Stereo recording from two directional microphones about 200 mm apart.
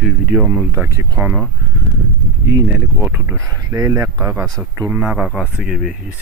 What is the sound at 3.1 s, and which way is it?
Speech, 10° right (ahead or behind).